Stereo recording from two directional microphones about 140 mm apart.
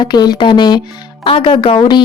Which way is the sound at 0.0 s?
30° left (ahead or behind).